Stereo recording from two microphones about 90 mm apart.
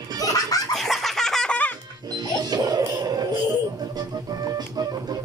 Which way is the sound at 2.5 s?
45° right (ahead or behind).